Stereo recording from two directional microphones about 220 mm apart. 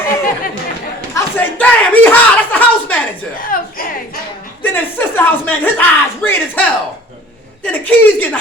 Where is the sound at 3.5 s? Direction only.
40° left (ahead or behind).